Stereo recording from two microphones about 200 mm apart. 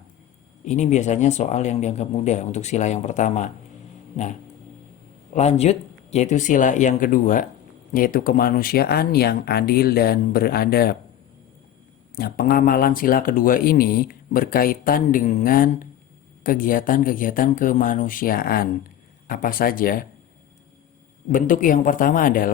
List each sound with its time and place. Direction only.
0.6 s speech: 35° left (ahead or behind)
5.3 s speech: 35° left (ahead or behind); by 10.9 s 50° left (ahead or behind)
12.1 s speech: 45° left (ahead or behind)
21.3 s speech: 40° left (ahead or behind)